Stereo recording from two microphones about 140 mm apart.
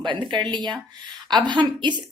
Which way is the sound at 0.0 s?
35° right (ahead or behind).